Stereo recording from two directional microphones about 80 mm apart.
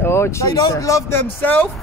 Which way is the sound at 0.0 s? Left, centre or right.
Left.